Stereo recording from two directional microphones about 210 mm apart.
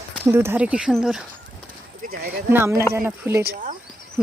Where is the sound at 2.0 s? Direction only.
45° right (ahead or behind).